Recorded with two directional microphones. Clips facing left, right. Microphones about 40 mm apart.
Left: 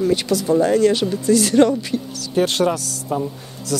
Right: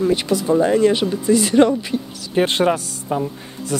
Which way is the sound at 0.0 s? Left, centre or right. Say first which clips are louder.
Even; right.